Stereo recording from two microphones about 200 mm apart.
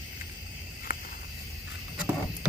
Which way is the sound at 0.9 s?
45° left (ahead or behind).